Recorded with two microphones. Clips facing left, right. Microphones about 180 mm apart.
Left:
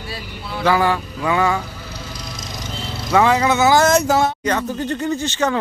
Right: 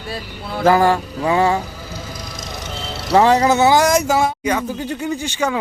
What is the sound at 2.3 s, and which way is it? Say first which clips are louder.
Insect: right 1 dB; 60° right (ahead or behind).